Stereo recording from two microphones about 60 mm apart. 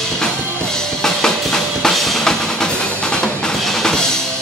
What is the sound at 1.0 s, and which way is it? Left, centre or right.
Music, centre.